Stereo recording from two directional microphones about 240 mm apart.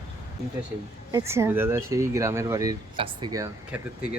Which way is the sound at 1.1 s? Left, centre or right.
Centre.